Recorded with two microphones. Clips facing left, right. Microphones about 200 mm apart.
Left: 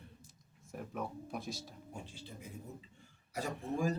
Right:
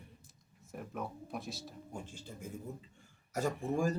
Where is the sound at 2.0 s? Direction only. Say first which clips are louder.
Right 3 dB; 45° right (ahead or behind).